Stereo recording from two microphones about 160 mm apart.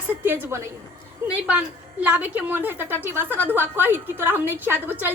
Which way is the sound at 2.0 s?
10° right (ahead or behind).